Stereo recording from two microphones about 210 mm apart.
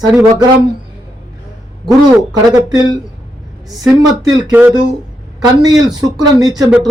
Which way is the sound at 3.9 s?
5° right (ahead or behind).